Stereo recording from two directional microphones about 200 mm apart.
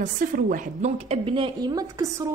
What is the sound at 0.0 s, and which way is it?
A woman's voice, 40° right (ahead or behind).